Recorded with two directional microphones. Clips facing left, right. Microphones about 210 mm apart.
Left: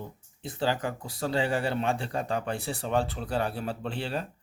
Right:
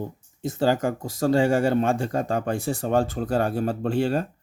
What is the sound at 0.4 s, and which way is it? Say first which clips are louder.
Speech: right 7 dB; 45° right (ahead or behind).